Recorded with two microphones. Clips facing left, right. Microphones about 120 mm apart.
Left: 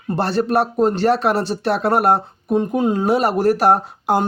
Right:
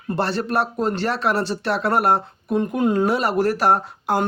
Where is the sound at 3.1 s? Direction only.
45° left (ahead or behind).